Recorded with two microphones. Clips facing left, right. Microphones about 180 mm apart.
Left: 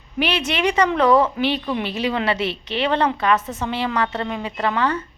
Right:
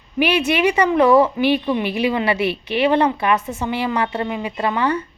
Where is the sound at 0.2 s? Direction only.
10° right (ahead or behind).